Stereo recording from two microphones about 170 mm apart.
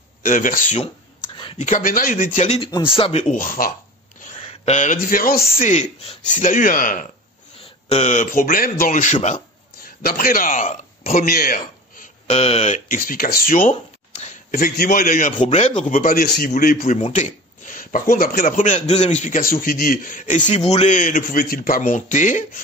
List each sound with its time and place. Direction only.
0.2 s speech: 50° left (ahead or behind)
1.3 s a sound: 30° left (ahead or behind)
1.6 s speech: 50° left (ahead or behind)
4.3 s speech: 40° left (ahead or behind)
9.8 s speech: 55° left (ahead or behind)
12.4 s speech: 40° left (ahead or behind)
14.5 s a man's voice: 60° left (ahead or behind)
15.4 s a man's voice: 45° left (ahead or behind)
16.9 s speech: 40° left (ahead or behind)